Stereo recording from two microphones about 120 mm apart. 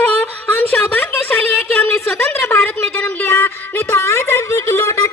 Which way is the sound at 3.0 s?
15° left (ahead or behind).